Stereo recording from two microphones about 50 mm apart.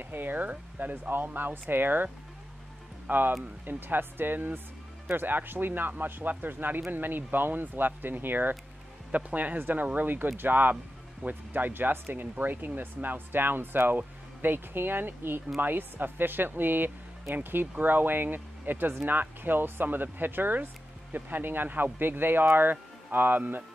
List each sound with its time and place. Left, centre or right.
0.0 s speech: right
3.1 s speech: right
9.6 s speech: right